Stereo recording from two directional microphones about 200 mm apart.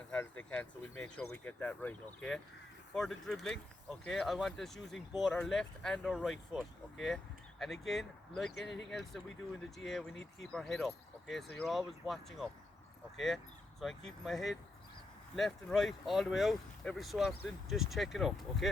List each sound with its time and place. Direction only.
0.1 s speech: 10° left (ahead or behind)
7.6 s speech: centre (ahead or behind)
8.5 s speech: 65° left (ahead or behind)
8.9 s speech: centre (ahead or behind)